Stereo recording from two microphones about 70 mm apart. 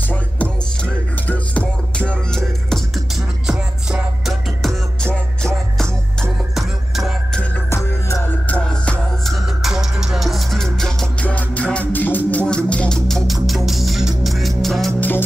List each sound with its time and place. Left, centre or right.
0.1 s music: left
5.0 s music: centre
6.5 s music: centre
9.2 s music: centre
11.1 s music: left
12.3 s music: centre
13.7 s music: centre
15.0 s music: left